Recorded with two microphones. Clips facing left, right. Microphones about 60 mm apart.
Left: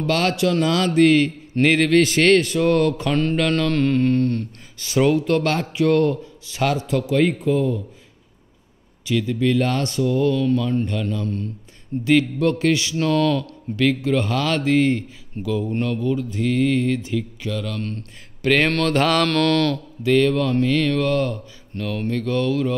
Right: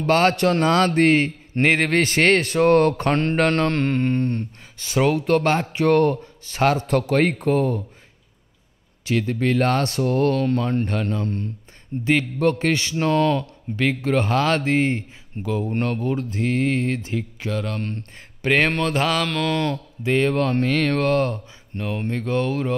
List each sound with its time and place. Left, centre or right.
0.0 s speech: right
5.8 s speech: right
9.0 s speech: right
15.7 s speech: right
18.5 s speech: centre
18.9 s mantra: centre
19.5 s speech: right
20.3 s speech: right